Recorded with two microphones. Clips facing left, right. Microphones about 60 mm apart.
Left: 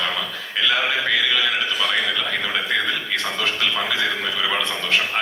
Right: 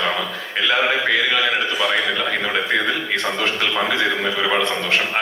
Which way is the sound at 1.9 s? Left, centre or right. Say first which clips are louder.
Right 2 dB; right.